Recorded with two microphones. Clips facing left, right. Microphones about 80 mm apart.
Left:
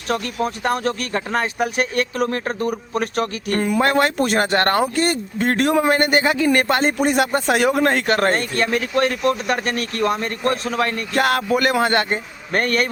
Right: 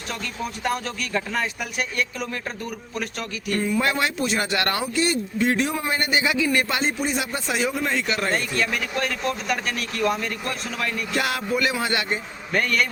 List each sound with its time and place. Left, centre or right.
0.1 s speech: left